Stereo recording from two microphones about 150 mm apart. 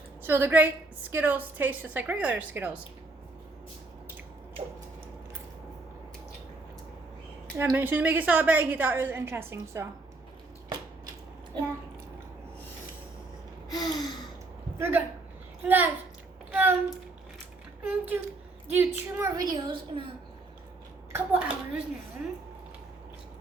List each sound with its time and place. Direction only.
0.2 s a woman's voice: 15° right (ahead or behind)
7.5 s a woman's voice: 15° right (ahead or behind)
13.7 s gasp: 25° left (ahead or behind)
14.8 s a woman's voice: 15° right (ahead or behind)
16.5 s a sound: 10° right (ahead or behind)
17.8 s a woman's voice: 10° right (ahead or behind); by 20.1 s 30° right (ahead or behind)
21.1 s a woman's voice: 10° right (ahead or behind)